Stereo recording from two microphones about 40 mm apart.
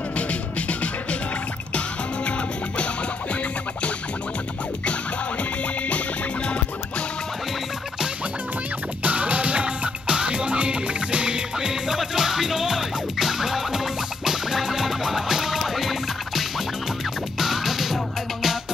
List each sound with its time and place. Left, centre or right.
0.3 s music: left
5.4 s music: left
9.0 s music: right; by 17.9 s centre